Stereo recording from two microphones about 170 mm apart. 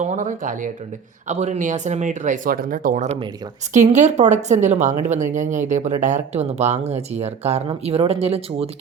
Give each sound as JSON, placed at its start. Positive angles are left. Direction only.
{"t": 0.0, "sound": "speech", "side_deg": -45}